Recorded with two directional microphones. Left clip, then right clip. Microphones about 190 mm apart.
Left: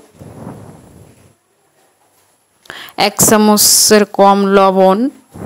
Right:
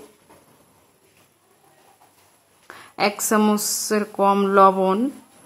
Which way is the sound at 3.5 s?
40° left (ahead or behind).